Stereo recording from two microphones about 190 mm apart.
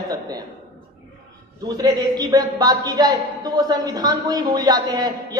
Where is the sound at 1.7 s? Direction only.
20° right (ahead or behind).